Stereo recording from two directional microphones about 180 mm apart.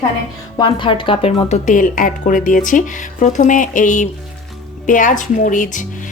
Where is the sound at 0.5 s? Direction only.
25° left (ahead or behind).